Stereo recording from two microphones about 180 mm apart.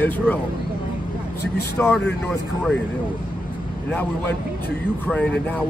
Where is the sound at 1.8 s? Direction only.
10° left (ahead or behind).